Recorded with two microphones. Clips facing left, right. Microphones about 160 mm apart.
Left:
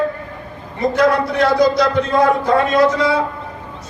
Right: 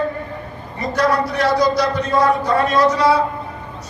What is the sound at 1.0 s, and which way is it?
A man's voice, 55° left (ahead or behind).